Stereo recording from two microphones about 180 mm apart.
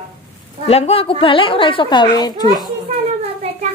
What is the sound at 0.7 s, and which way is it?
A woman's voice, 35° left (ahead or behind).